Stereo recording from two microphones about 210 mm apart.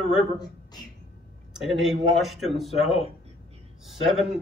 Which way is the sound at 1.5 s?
Centre (ahead or behind).